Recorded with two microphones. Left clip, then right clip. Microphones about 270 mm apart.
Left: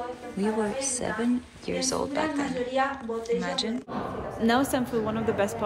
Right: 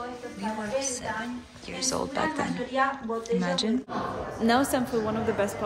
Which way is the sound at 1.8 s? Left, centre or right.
Centre.